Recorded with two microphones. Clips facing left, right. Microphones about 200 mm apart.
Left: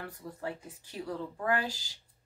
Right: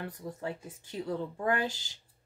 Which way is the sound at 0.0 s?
20° right (ahead or behind).